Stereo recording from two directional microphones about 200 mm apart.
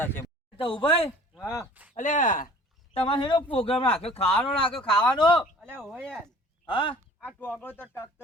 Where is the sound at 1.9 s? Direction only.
40° left (ahead or behind).